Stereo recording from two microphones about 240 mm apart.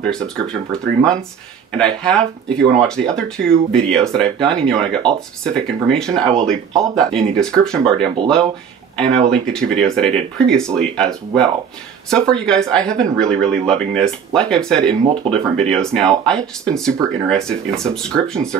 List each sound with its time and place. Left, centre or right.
0.0 s speech: centre
9.1 s speech: centre
14.9 s speech: right
15.5 s speech: centre